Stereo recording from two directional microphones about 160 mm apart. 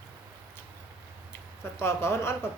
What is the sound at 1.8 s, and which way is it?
Speech, 15° left (ahead or behind).